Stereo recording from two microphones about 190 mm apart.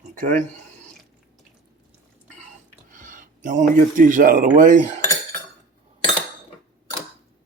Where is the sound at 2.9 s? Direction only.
45° right (ahead or behind).